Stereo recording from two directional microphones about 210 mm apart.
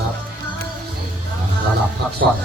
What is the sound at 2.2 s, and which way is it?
Speech, 60° right (ahead or behind).